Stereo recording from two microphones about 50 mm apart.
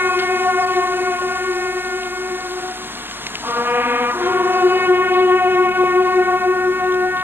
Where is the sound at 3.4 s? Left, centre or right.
Right.